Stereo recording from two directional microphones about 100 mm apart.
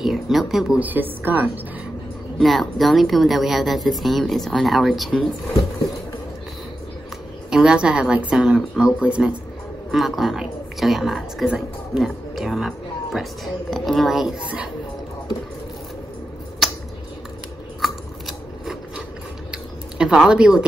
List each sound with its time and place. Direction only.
0.0 s speech: 5° right (ahead or behind)
0.7 s a woman's voice: 20° right (ahead or behind)
2.3 s speech: centre (ahead or behind)
7.5 s a woman's voice: 10° right (ahead or behind)
16.6 s a sound: centre (ahead or behind)
17.8 s scissors: centre (ahead or behind)
19.5 s a sound: 5° right (ahead or behind)